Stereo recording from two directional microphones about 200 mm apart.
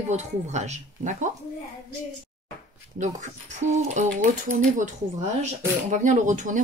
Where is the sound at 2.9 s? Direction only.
35° right (ahead or behind).